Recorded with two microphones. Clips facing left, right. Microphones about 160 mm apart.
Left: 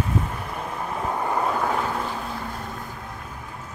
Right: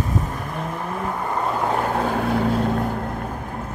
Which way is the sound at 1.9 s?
65° right (ahead or behind).